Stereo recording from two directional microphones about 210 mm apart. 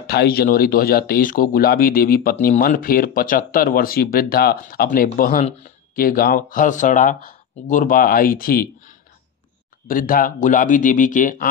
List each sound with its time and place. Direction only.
0.0 s speech: 50° left (ahead or behind)